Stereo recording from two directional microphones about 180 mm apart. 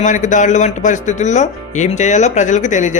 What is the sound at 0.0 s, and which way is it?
Speech, 45° left (ahead or behind).